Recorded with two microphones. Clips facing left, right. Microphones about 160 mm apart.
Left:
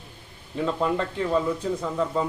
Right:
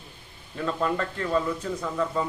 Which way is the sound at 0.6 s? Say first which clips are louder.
Left 2 dB; 20° left (ahead or behind).